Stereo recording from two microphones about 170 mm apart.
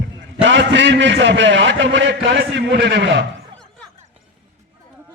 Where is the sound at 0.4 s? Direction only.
90° right.